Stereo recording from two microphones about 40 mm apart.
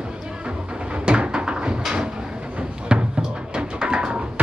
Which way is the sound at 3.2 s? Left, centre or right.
Right.